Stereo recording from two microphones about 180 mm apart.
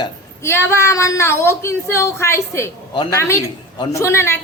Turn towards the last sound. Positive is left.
turn(degrees=15)  # may be behind; listen again after turning